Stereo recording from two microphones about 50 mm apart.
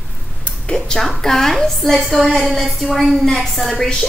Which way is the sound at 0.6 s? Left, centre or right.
Centre.